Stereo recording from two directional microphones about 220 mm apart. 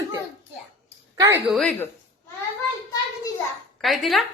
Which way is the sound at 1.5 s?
5° left (ahead or behind).